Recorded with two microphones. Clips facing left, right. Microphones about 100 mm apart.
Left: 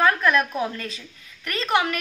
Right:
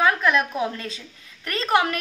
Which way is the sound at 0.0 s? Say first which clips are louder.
Even; 15° right (ahead or behind).